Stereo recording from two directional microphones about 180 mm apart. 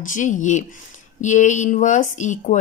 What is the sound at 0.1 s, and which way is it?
Speech, 45° left (ahead or behind).